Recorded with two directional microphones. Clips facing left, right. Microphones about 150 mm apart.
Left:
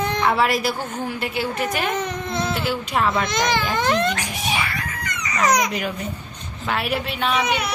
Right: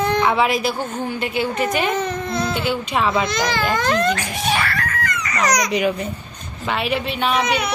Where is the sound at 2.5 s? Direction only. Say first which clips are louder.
Right 2 dB; centre (ahead or behind).